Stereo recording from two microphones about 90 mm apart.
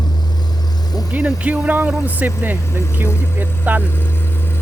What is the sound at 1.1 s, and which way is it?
Speech, 20° right (ahead or behind).